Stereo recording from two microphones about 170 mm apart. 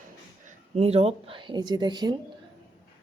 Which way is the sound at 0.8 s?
35° right (ahead or behind).